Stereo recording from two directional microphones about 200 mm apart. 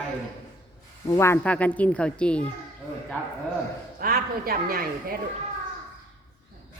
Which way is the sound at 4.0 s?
45° right (ahead or behind).